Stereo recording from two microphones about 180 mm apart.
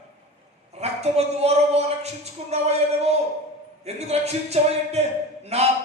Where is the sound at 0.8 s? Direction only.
35° right (ahead or behind).